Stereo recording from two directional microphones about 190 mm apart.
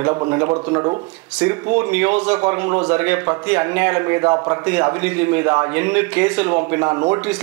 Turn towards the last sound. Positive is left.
turn(degrees=-10)  # may be behind; listen again after turning